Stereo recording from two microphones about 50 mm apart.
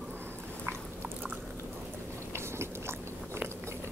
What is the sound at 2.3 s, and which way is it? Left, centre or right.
Biting, right.